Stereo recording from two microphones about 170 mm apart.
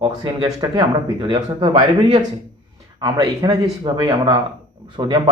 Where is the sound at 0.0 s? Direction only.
20° right (ahead or behind).